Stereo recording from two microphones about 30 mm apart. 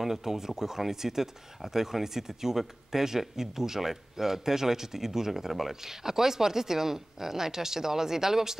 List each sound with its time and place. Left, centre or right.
0.0 s a man's voice: centre